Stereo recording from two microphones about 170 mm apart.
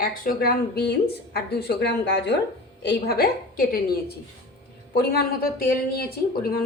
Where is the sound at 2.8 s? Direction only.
70° left (ahead or behind).